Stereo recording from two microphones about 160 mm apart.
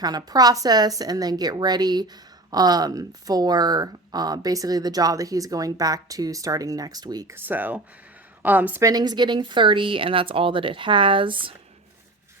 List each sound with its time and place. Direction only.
0.0 s a woman's voice: 25° right (ahead or behind)
8.9 s speech: 25° right (ahead or behind)